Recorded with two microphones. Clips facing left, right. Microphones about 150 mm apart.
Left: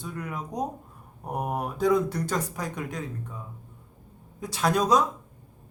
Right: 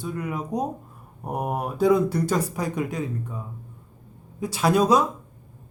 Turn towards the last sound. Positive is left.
turn(degrees=-5)  # may be behind; listen again after turning